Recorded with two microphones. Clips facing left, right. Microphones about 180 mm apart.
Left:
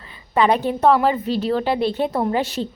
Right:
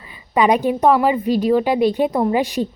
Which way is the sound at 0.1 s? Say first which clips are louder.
Right 2 dB; 15° right (ahead or behind).